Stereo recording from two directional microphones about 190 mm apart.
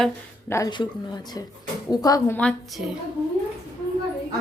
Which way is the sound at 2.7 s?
Centre (ahead or behind).